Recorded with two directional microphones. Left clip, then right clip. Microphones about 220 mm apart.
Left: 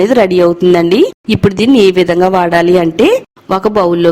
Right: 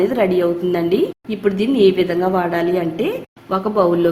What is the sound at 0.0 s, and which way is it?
A woman's voice, 45° left (ahead or behind).